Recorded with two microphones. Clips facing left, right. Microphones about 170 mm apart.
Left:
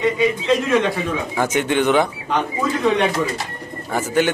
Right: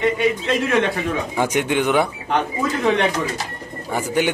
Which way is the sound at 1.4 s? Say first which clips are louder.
Left 1 dB; 15° right (ahead or behind).